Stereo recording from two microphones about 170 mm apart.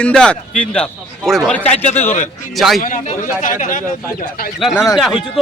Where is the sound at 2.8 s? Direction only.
50° left (ahead or behind).